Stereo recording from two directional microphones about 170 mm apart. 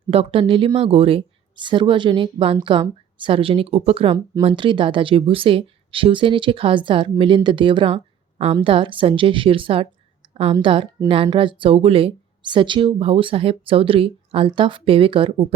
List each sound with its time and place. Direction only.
0.1 s speech: 35° right (ahead or behind)